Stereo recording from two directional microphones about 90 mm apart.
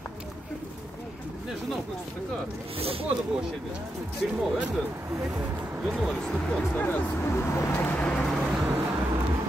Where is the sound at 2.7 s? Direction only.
90° right.